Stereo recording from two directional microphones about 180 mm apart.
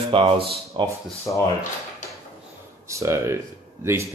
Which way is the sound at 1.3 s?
20° left (ahead or behind).